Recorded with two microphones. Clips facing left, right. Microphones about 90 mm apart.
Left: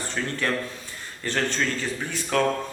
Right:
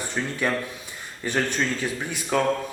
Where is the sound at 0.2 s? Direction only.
15° right (ahead or behind).